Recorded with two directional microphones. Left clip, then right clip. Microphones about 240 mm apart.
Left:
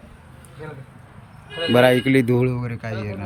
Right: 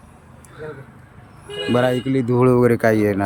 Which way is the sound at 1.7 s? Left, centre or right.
Centre.